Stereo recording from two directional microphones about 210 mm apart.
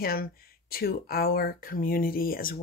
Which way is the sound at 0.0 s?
45° left (ahead or behind).